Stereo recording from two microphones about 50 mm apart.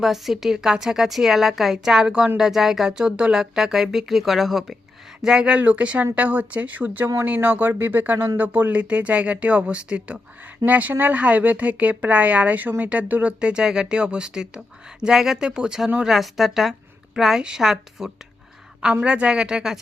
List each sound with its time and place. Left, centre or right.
0.0 s a woman's voice: centre
5.2 s a woman's voice: centre
5.5 s speech: right
13.4 s a woman's voice: centre
16.0 s a woman's voice: centre